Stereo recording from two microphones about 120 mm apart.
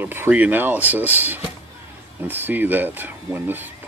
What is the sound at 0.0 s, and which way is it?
Speech, 15° right (ahead or behind).